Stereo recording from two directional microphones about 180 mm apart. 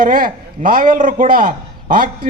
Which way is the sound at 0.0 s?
50° right (ahead or behind).